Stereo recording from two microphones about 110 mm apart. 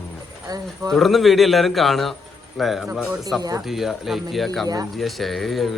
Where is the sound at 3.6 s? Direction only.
Centre (ahead or behind).